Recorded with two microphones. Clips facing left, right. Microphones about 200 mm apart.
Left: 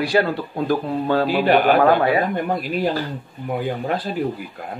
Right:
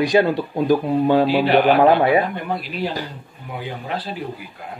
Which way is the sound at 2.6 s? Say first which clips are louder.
Left 4 dB; 45° left (ahead or behind).